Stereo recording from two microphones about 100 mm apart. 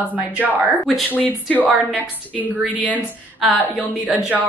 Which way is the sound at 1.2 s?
15° left (ahead or behind).